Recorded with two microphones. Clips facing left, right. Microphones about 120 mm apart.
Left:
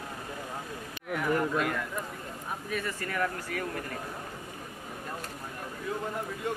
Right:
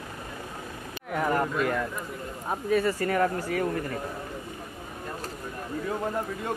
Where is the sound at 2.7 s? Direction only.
35° right (ahead or behind).